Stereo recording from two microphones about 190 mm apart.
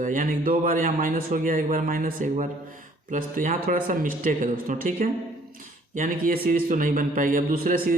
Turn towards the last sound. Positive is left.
turn(degrees=-50)  # may be behind; listen again after turning